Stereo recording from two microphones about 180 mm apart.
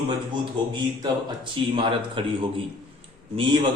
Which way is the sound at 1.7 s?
25° right (ahead or behind).